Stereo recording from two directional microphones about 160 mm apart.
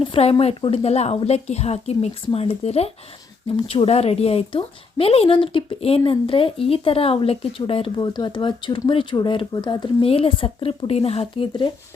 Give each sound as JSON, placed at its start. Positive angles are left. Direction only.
{"t": 0.0, "sound": "a woman's voice", "side_deg": 35}